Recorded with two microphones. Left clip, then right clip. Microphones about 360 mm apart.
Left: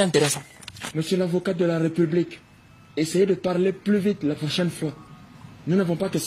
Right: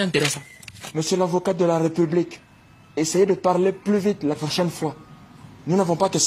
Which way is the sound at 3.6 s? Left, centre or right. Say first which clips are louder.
Right 2 dB; centre.